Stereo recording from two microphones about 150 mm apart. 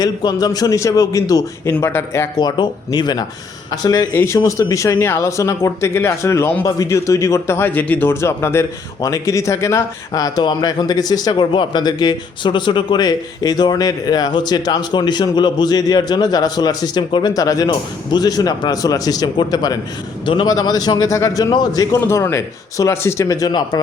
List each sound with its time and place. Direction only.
0.0 s speech: 25° left (ahead or behind)
2.4 s speech: 30° left (ahead or behind)